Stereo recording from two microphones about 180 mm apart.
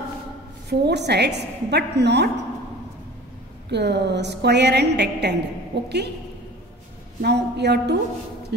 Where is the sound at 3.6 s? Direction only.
70° right (ahead or behind).